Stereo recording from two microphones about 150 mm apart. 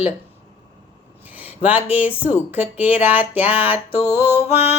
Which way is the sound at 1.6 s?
10° right (ahead or behind).